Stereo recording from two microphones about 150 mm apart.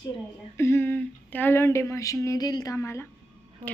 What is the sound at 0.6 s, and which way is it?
Speech, 15° left (ahead or behind).